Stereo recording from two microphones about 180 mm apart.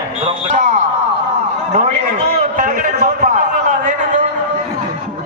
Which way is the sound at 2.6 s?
45° right (ahead or behind).